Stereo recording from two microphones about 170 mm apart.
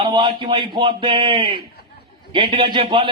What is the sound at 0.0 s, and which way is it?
A man's voice, 30° right (ahead or behind).